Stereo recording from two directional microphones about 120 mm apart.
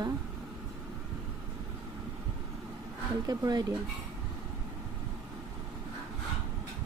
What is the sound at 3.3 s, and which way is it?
Speech, 35° right (ahead or behind).